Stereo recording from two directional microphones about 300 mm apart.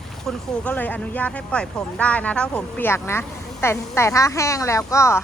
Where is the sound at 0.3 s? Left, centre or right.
Centre.